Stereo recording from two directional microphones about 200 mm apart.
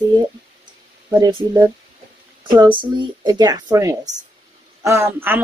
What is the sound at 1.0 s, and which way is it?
Speech, 20° right (ahead or behind).